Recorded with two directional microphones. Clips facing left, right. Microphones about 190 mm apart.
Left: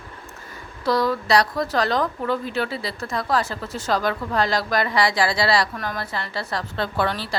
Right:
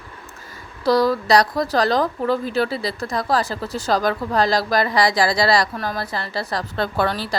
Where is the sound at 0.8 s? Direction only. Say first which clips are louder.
Right 4 dB; 35° right (ahead or behind).